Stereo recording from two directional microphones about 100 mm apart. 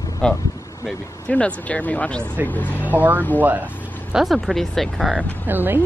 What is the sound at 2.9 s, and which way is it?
Speech, 15° right (ahead or behind).